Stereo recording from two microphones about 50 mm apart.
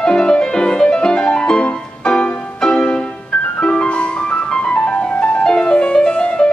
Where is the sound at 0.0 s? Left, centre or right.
Centre.